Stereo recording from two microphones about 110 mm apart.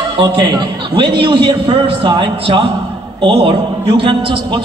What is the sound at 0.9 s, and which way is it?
A man's voice, 50° right (ahead or behind).